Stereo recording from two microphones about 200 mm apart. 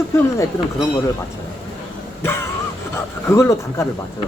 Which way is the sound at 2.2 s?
10° left (ahead or behind).